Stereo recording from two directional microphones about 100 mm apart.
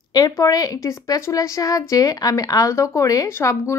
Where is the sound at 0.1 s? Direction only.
40° left (ahead or behind).